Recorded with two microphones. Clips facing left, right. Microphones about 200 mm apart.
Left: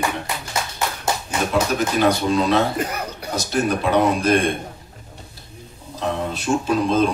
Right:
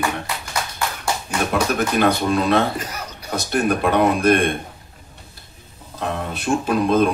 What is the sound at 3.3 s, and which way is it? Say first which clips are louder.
A man's voice: right 1 dB; 55° right (ahead or behind).